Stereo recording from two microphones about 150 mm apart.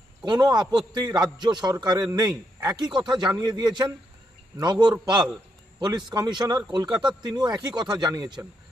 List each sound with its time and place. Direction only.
0.2 s a man's voice: 30° right (ahead or behind)
6.0 s a man's voice: 25° right (ahead or behind)